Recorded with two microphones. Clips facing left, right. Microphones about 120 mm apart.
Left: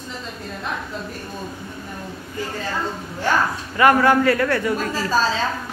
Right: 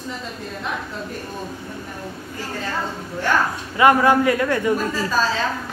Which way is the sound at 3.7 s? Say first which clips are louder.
Even; 15° right (ahead or behind).